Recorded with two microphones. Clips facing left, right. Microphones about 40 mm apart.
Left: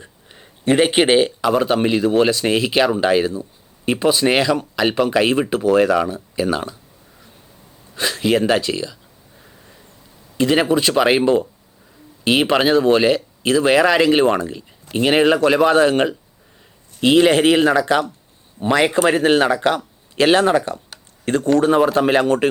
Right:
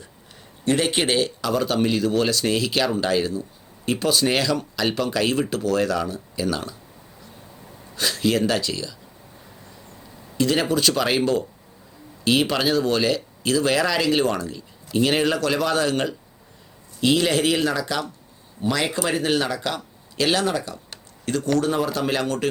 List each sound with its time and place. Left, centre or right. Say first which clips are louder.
0.6 s speech: left 6 dB; left
7.9 s speech: left 4 dB; left
10.3 s speech: left 5 dB; left
12.2 s speech: left 5 dB; left